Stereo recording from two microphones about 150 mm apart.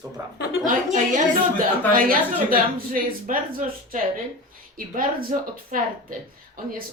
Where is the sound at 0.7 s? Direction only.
65° right (ahead or behind).